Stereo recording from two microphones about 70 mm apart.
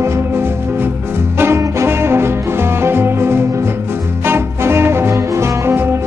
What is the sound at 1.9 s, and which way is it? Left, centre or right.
Music, right.